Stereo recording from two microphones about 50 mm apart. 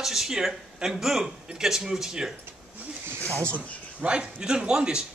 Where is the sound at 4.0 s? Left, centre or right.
Centre.